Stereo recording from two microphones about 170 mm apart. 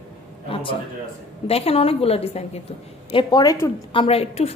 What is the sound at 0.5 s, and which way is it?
A man's voice, 30° left (ahead or behind).